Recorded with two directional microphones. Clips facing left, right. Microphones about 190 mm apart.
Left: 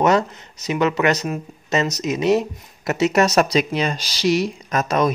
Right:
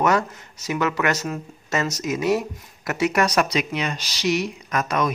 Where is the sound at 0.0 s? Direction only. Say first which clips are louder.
Left 3 dB; 20° left (ahead or behind).